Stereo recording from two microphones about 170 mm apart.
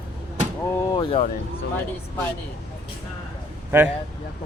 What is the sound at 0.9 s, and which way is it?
Speech, 25° left (ahead or behind).